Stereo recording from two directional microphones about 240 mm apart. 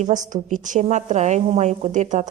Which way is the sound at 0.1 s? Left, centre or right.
Right.